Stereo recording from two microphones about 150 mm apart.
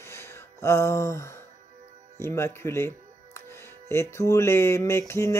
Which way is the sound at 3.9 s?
15° left (ahead or behind).